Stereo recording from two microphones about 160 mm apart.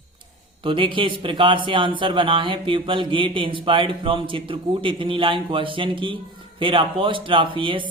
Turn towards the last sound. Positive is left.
turn(degrees=-30)  # may be behind; listen again after turning